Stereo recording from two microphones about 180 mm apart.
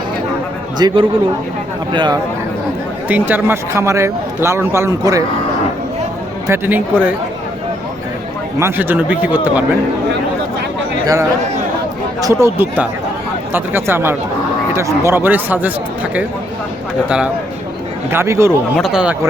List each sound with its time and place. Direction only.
0.8 s a man's voice: 25° right (ahead or behind)
3.1 s speech: 10° right (ahead or behind)
6.5 s speech: 10° right (ahead or behind)
8.5 s speech: 10° right (ahead or behind)
11.0 s speech: 20° right (ahead or behind)
18.1 s speech: 15° right (ahead or behind)
18.8 s speech: 5° right (ahead or behind)